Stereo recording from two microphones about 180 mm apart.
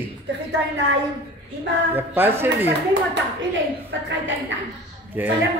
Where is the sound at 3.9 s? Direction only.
90° right.